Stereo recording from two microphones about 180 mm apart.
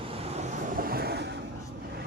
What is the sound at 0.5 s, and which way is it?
Vehicle, 55° right (ahead or behind).